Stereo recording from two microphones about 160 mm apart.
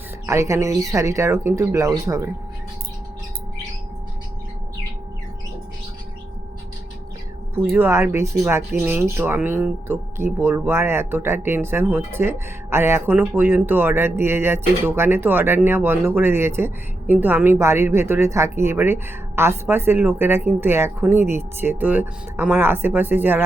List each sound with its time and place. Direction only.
0.3 s speech: 20° right (ahead or behind)
7.5 s speech: 15° right (ahead or behind)